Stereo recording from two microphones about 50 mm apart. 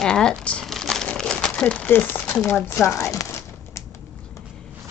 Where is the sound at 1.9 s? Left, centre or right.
Left.